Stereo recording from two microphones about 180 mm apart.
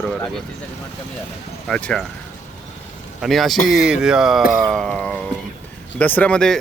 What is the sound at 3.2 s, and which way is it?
Speech, centre (ahead or behind).